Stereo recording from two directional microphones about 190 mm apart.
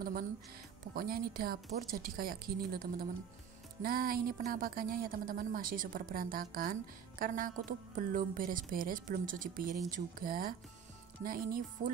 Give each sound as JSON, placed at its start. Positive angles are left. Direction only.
{"t": 0.9, "sound": "a woman's voice", "side_deg": -50}